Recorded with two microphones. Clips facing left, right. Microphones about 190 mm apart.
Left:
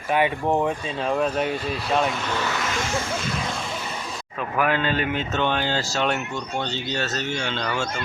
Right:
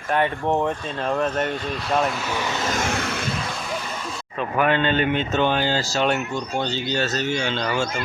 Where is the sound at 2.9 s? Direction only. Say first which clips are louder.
Right 1 dB; 70° right (ahead or behind).